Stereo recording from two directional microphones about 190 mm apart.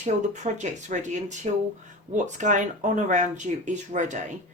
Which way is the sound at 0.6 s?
40° right (ahead or behind).